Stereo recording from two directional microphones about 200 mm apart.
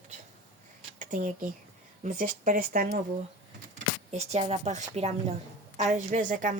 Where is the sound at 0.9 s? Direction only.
40° right (ahead or behind).